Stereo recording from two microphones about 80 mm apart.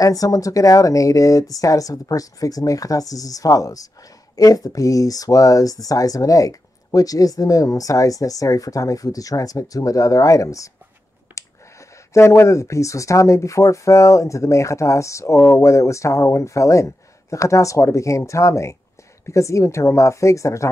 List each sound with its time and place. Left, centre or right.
0.0 s speech: left
12.1 s speech: left